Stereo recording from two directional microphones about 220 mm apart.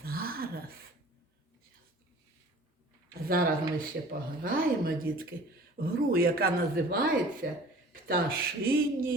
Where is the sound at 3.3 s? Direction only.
40° right (ahead or behind).